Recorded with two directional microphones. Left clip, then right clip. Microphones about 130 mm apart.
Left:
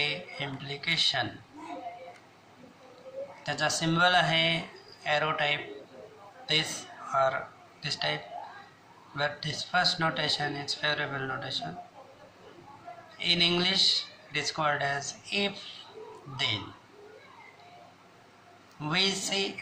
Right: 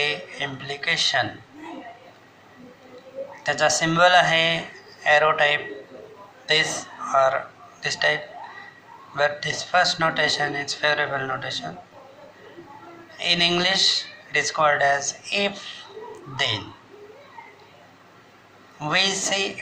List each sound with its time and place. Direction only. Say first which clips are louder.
0.0 s speech: right 6 dB; 40° right (ahead or behind)
3.4 s a man's voice: right 9 dB; 45° right (ahead or behind)
13.1 s speech: right 5 dB; 40° right (ahead or behind)
18.8 s speech: right 7 dB; 40° right (ahead or behind)